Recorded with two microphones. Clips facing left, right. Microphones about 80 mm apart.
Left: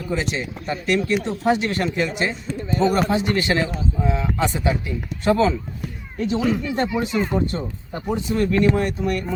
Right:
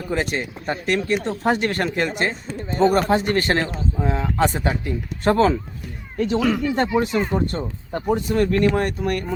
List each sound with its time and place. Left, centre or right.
0.1 s speech: right
6.4 s speech: right
6.7 s speech: right